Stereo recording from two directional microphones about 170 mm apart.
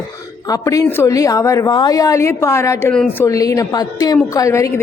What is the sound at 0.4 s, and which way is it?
A woman's voice, 20° left (ahead or behind).